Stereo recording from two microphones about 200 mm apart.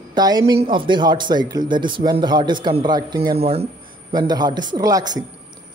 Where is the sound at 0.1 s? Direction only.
20° right (ahead or behind).